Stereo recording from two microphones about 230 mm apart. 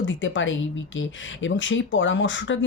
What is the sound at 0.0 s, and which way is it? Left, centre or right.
Speech, left.